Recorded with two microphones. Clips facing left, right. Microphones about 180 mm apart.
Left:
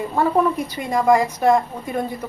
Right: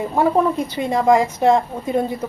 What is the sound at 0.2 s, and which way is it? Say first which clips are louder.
A woman's voice: right 2 dB; 25° right (ahead or behind).